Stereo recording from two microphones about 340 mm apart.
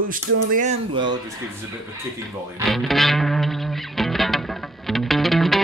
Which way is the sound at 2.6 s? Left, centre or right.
Centre.